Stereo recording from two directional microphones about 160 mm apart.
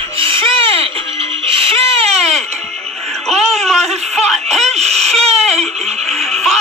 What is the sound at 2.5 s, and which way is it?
Music, 40° right (ahead or behind).